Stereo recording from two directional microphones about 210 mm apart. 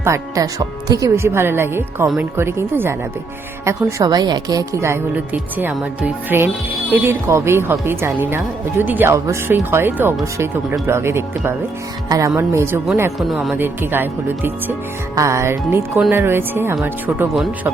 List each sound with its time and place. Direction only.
0.0 s a woman's voice: 15° right (ahead or behind)